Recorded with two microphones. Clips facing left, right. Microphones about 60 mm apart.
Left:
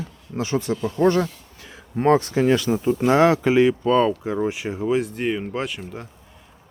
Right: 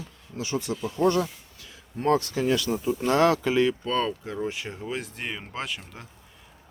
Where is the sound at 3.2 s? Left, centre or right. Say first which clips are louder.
Left 4 dB; left; by 6.1 s centre.